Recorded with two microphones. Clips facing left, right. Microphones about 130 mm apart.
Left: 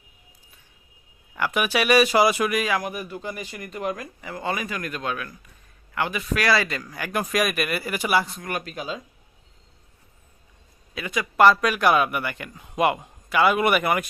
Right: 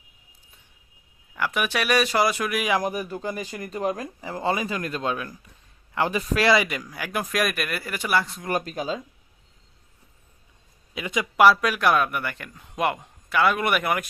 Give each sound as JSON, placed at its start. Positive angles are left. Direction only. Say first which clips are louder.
{"t": 1.4, "sound": "a man's voice", "louder": "left 2 dB", "side_deg": 0}
{"t": 2.8, "sound": "a man's voice", "louder": "right 3 dB", "side_deg": -40}
{"t": 8.4, "sound": "speech", "louder": "right 4 dB", "side_deg": -35}
{"t": 10.9, "sound": "speech", "louder": "right 1 dB", "side_deg": -20}
{"t": 11.5, "sound": "a man's voice", "louder": "left 2 dB", "side_deg": 0}